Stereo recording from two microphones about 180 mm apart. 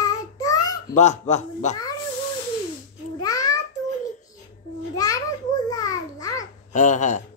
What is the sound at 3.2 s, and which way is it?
Babbling, 20° left (ahead or behind).